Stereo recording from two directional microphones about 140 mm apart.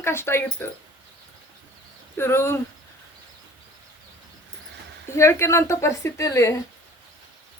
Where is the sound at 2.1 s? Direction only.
15° left (ahead or behind).